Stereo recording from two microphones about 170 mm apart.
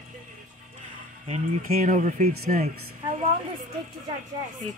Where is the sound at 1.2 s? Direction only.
45° right (ahead or behind).